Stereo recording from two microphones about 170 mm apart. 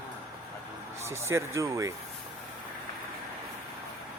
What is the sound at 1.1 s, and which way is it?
Speech, 15° right (ahead or behind).